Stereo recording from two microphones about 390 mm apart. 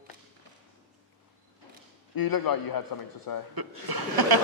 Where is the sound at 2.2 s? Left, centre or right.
Left.